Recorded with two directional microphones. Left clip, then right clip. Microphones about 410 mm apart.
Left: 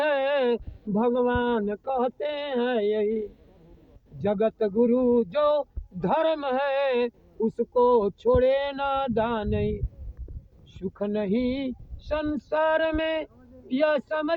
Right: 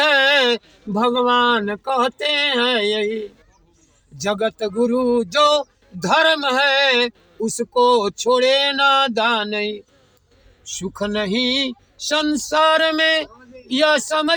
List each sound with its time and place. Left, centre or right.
0.0 s speech: left